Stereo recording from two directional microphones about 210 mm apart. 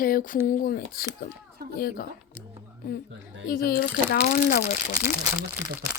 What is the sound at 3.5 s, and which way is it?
Speech, 45° left (ahead or behind).